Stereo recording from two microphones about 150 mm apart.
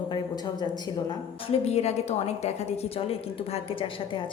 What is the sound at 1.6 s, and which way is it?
A woman's voice, 45° left (ahead or behind).